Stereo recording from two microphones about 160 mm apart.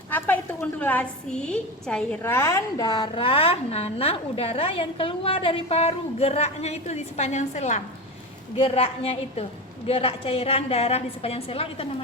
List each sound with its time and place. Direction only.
0.8 s a woman's voice: 10° left (ahead or behind); by 12.0 s 35° left (ahead or behind)